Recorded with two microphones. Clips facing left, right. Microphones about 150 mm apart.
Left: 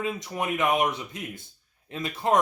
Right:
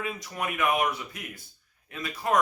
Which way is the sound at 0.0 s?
20° left (ahead or behind).